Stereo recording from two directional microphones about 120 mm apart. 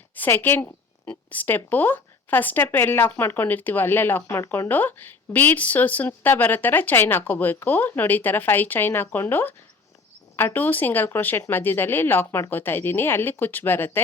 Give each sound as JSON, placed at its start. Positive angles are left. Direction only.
{"t": 0.2, "sound": "a woman's voice", "side_deg": 15}